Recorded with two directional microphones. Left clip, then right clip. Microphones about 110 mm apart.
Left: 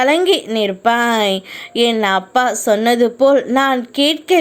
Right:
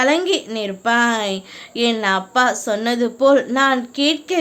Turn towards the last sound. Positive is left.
turn(degrees=50)  # may be behind; listen again after turning